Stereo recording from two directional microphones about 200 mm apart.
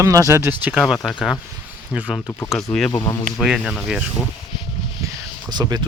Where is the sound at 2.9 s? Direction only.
15° left (ahead or behind).